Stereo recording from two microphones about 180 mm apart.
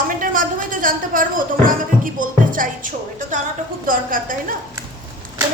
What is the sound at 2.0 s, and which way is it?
Music, 50° right (ahead or behind).